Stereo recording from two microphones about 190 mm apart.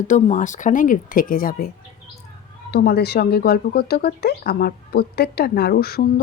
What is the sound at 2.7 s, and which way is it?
Speech, 60° left (ahead or behind).